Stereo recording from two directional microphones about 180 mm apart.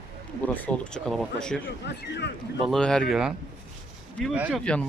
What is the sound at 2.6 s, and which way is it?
Speech, 5° left (ahead or behind).